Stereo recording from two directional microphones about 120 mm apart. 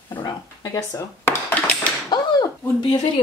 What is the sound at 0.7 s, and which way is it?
Dishes, 25° left (ahead or behind).